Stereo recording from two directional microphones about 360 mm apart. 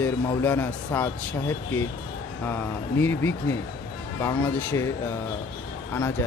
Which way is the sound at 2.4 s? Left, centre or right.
Centre.